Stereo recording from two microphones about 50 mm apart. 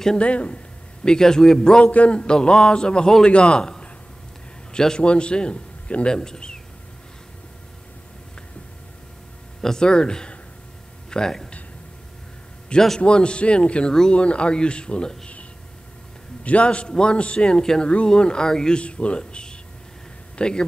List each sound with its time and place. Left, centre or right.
0.2 s a man's voice: left
1.0 s a man's voice: centre
9.6 s speech: centre
12.7 s a man's voice: left
16.4 s a man's voice: left